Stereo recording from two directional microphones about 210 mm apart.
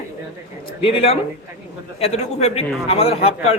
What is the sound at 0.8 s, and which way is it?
A man's voice, 25° left (ahead or behind).